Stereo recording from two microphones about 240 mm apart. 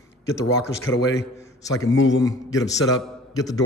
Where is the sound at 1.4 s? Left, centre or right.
Centre.